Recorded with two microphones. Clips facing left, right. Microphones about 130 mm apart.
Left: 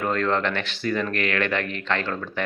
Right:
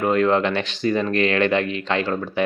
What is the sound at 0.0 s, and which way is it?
Speech, 15° right (ahead or behind).